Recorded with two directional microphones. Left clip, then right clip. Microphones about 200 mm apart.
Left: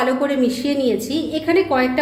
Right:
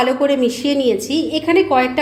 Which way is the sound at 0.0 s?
30° right (ahead or behind).